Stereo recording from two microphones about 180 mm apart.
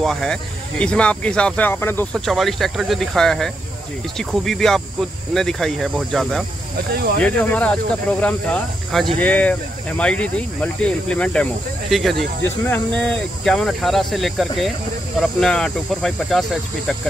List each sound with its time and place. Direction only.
0.0 s speech: 5° left (ahead or behind)
2.1 s speech: centre (ahead or behind)
12.4 s speech: 10° left (ahead or behind)